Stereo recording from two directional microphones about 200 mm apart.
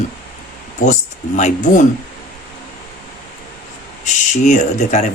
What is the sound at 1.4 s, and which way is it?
Speech, 40° left (ahead or behind).